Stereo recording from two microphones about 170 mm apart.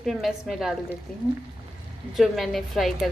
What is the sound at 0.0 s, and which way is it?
Speech, centre (ahead or behind).